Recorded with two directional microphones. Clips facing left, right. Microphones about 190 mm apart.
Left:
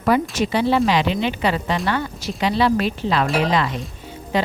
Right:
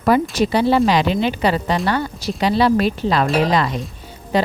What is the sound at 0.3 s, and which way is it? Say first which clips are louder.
A woman's voice: right 3 dB; 40° right (ahead or behind).